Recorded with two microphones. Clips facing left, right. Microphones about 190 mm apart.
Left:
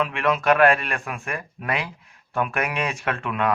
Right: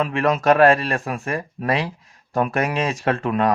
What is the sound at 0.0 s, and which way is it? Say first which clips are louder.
Speech: right 3 dB; 40° right (ahead or behind).